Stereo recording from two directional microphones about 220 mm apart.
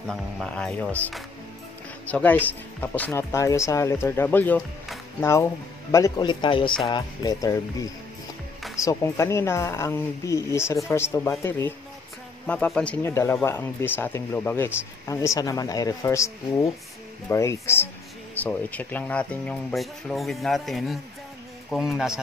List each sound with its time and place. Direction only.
0.0 s speech: centre (ahead or behind); by 7.5 s 20° left (ahead or behind)
8.7 s speech: 15° left (ahead or behind)